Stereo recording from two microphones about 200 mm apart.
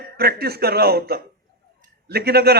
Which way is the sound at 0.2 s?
50° right (ahead or behind).